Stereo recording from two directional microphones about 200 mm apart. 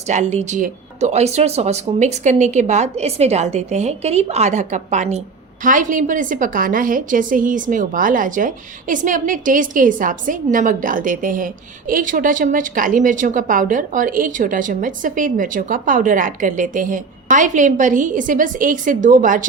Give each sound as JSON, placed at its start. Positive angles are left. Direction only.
{"t": 0.1, "sound": "a woman's voice", "side_deg": -35}